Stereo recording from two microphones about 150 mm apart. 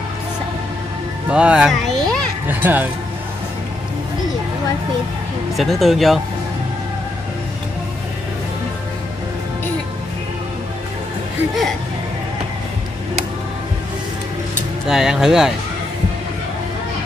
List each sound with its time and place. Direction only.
1.3 s a child's voice: 5° right (ahead or behind)
2.4 s speech: 10° right (ahead or behind)
5.6 s speech: centre (ahead or behind)
14.9 s speech: 5° right (ahead or behind)